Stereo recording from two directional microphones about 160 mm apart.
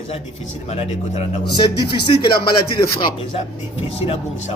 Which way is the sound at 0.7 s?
40° left (ahead or behind).